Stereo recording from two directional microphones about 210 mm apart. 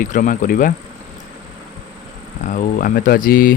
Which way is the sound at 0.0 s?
40° left (ahead or behind).